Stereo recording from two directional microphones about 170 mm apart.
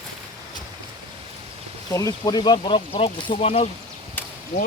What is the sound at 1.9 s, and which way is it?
Speech, 20° left (ahead or behind).